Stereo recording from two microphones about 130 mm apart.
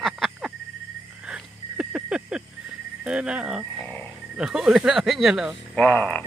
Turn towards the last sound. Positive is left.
turn(degrees=10)  # may be behind; listen again after turning